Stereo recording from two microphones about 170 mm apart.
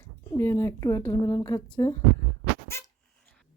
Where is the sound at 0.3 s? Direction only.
15° left (ahead or behind).